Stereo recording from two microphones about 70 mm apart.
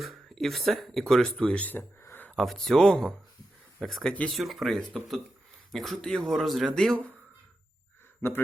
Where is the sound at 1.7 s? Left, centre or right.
Left.